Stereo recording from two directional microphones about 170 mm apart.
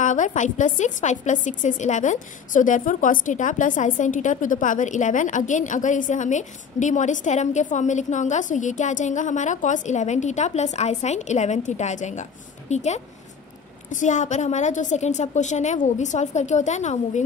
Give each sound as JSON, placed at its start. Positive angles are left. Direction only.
{"t": 0.0, "sound": "a woman's voice", "side_deg": 50}